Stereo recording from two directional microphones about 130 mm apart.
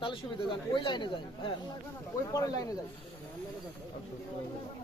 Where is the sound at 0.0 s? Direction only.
40° left (ahead or behind).